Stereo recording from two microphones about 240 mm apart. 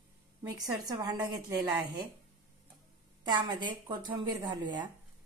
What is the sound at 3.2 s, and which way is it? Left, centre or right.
Speech, centre.